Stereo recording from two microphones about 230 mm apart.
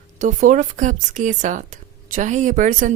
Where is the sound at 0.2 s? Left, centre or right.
Right.